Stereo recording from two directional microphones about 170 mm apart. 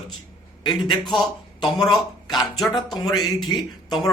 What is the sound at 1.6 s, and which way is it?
Speech, 25° left (ahead or behind).